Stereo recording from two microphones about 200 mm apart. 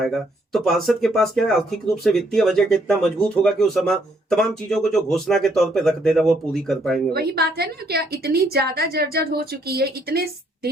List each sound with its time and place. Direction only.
0.0 s speech: centre (ahead or behind)
7.1 s a woman's voice: 50° right (ahead or behind)